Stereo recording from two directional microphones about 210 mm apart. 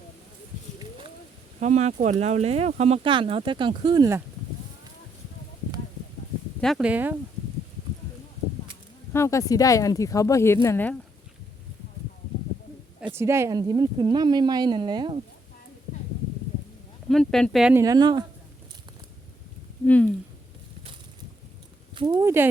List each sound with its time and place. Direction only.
1.5 s speech: 35° right (ahead or behind); by 4.2 s 20° right (ahead or behind)
6.6 s speech: centre (ahead or behind)
9.1 s speech: 15° left (ahead or behind)
13.1 s speech: 15° right (ahead or behind)
17.1 s speech: centre (ahead or behind)
17.8 s speech: 20° right (ahead or behind)
19.8 s speech: 5° left (ahead or behind)
21.9 s speech: 20° right (ahead or behind)